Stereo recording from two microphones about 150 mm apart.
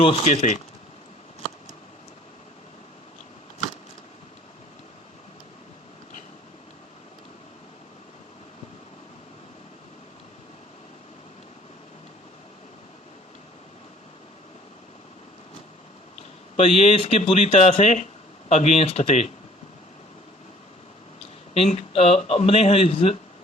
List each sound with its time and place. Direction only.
0.3 s speech: 55° left (ahead or behind)
16.6 s speech: 40° left (ahead or behind)
21.2 s a man's voice: 40° left (ahead or behind)